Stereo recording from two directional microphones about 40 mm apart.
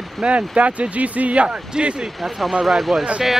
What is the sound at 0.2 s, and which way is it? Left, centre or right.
Speech, centre.